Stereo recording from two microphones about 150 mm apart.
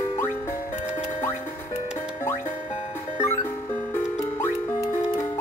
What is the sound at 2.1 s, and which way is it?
Music, 15° left (ahead or behind).